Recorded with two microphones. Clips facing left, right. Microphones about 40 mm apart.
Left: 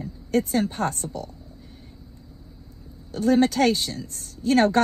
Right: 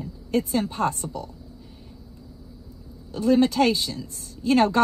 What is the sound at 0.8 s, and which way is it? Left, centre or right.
Speech, right.